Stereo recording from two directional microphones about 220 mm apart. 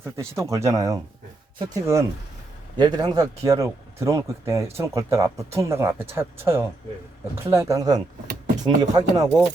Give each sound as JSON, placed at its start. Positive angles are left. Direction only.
{"t": 0.0, "sound": "speech", "side_deg": -10}